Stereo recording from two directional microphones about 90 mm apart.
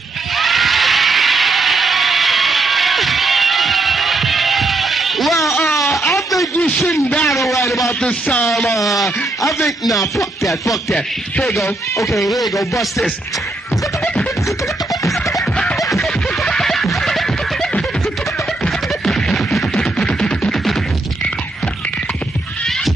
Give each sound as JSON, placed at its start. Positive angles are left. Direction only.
{"t": 0.4, "sound": "a sound", "side_deg": 0}
{"t": 6.9, "sound": "a man's voice", "side_deg": 20}
{"t": 9.9, "sound": "music", "side_deg": 35}
{"t": 11.3, "sound": "speech", "side_deg": 5}
{"t": 11.6, "sound": "music", "side_deg": 35}
{"t": 12.2, "sound": "speech", "side_deg": 0}
{"t": 15.5, "sound": "scratching", "side_deg": 10}
{"t": 16.0, "sound": "a sound", "side_deg": 5}
{"t": 19.0, "sound": "music", "side_deg": 5}